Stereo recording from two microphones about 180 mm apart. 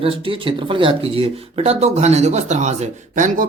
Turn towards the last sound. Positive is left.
turn(degrees=-45)  # may be behind; listen again after turning